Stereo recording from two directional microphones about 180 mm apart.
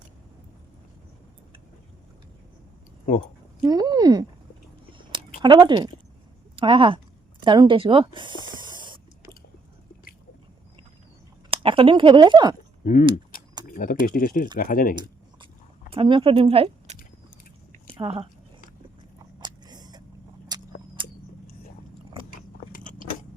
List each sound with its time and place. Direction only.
3.6 s speech: 20° right (ahead or behind)
4.9 s a sound: 25° right (ahead or behind)
5.4 s speech: 25° right (ahead or behind)
11.5 s speech: 30° right (ahead or behind)
12.8 s speech: 50° left (ahead or behind)
13.7 s typing: 50° left (ahead or behind)
14.1 s speech: 50° left (ahead or behind)
15.9 s speech: 30° right (ahead or behind)
17.7 s chewing: 30° right (ahead or behind)
19.4 s biting: 25° right (ahead or behind)
20.5 s a sound: 20° right (ahead or behind)
22.7 s biting: 45° left (ahead or behind)